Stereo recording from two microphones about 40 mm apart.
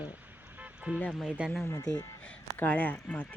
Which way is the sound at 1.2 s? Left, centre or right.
Right.